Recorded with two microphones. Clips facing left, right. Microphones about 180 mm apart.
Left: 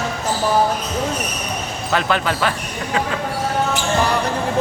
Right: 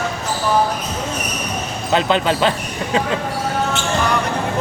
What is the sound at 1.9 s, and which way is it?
Speech, 20° right (ahead or behind).